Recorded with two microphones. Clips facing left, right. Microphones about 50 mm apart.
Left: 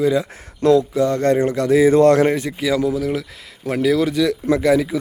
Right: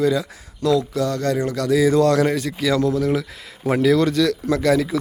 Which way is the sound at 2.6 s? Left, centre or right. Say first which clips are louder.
Even; centre.